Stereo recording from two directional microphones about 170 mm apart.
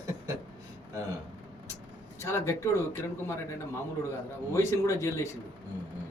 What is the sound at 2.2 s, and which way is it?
Speech, 15° left (ahead or behind).